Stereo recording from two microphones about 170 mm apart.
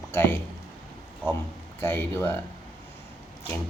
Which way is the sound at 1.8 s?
15° left (ahead or behind).